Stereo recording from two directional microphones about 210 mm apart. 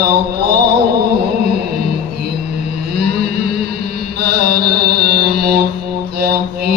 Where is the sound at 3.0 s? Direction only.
50° right (ahead or behind).